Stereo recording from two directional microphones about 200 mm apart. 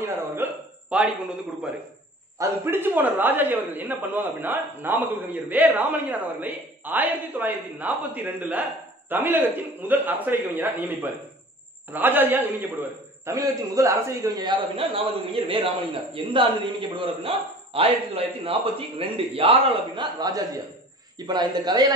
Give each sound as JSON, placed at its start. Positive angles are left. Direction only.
{"t": 0.0, "sound": "hiccup", "side_deg": -10}
{"t": 2.3, "sound": "a man's voice", "side_deg": -15}